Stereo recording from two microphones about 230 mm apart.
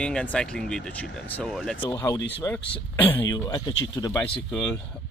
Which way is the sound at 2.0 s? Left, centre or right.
Centre.